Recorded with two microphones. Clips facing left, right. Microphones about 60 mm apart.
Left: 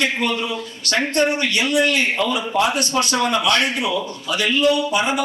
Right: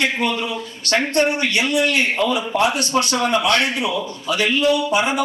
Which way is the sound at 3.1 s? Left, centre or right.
Right.